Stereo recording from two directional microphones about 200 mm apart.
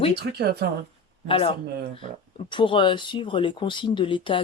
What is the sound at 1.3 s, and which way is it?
Speech, 25° left (ahead or behind).